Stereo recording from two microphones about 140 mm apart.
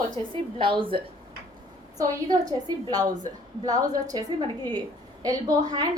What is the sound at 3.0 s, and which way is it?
Speech, 65° right (ahead or behind).